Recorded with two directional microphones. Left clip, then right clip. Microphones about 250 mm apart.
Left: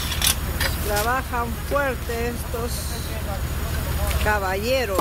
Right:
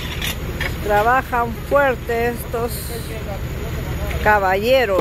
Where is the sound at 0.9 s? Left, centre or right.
Centre.